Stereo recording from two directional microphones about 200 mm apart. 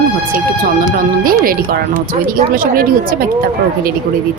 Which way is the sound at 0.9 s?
45° right (ahead or behind).